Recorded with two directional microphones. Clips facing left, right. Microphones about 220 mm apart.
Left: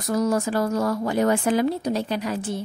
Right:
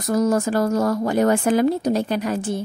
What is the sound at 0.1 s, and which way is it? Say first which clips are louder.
Speech: right 3 dB; 45° right (ahead or behind).